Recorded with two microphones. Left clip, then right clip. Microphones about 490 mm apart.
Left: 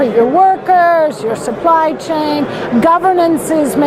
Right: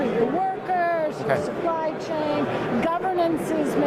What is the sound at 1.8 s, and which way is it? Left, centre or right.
A woman's voice, left.